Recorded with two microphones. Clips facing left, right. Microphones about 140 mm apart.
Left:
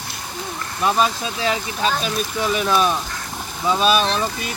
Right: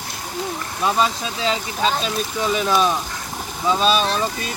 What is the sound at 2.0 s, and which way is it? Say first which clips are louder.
Speech: even; 5° left (ahead or behind).